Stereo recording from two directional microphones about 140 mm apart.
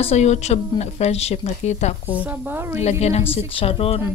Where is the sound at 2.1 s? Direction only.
10° right (ahead or behind).